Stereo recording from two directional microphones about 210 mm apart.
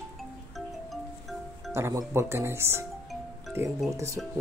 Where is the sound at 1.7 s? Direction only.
15° right (ahead or behind).